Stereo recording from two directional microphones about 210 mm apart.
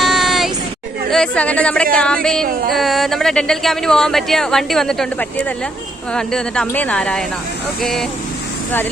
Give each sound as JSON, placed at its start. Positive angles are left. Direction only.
{"t": 0.0, "sound": "a sound", "side_deg": 0}
{"t": 1.1, "sound": "speech", "side_deg": 5}
{"t": 6.1, "sound": "speech", "side_deg": 5}